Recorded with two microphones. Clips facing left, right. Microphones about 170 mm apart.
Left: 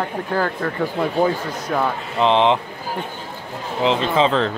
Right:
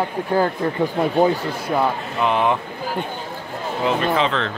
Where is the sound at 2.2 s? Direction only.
25° left (ahead or behind).